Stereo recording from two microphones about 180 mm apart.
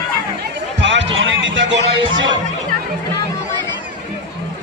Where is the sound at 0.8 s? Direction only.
85° right.